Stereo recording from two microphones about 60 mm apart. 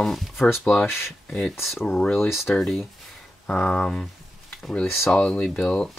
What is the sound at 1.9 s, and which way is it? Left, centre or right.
Speech, centre.